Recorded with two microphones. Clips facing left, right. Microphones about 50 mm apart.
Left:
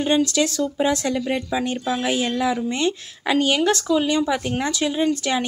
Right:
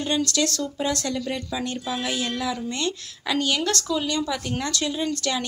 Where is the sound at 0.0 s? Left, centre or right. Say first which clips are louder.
Left 5 dB; left.